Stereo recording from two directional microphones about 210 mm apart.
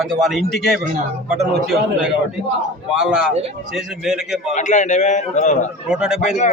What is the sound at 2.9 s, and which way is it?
Speech, 5° right (ahead or behind).